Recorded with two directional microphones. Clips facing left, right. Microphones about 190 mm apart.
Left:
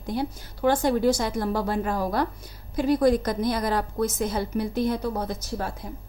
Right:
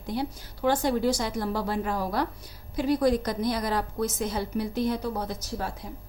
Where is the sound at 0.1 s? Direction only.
50° left (ahead or behind).